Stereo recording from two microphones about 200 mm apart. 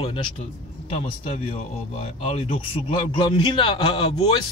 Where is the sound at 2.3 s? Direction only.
25° left (ahead or behind).